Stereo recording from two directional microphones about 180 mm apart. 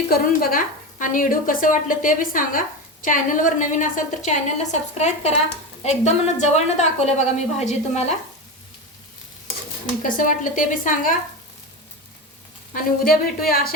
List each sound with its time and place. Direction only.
0.1 s a woman's voice: 55° left (ahead or behind)
10.0 s speech: 50° left (ahead or behind)
12.7 s a woman's voice: 55° left (ahead or behind)